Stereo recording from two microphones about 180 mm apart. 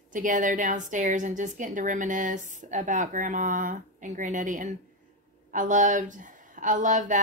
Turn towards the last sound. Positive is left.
turn(degrees=-45)  # may be behind; listen again after turning